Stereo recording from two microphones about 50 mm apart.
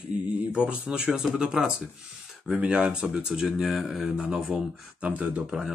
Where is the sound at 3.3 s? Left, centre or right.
Centre.